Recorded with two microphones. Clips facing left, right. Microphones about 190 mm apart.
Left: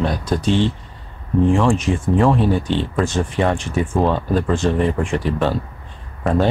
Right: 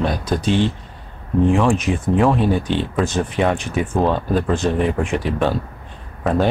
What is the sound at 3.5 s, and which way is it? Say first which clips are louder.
Speech: even; 15° right (ahead or behind).